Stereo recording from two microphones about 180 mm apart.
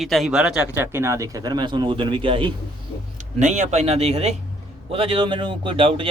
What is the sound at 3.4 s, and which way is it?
Speech, 40° right (ahead or behind).